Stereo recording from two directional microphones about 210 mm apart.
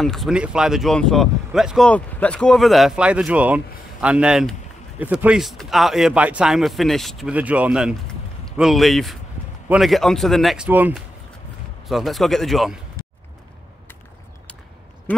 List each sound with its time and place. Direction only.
0.0 s speech: centre (ahead or behind)
11.9 s speech: centre (ahead or behind)
15.1 s speech: 10° left (ahead or behind)